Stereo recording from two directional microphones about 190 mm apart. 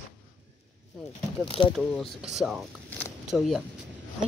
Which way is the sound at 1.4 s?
25° left (ahead or behind).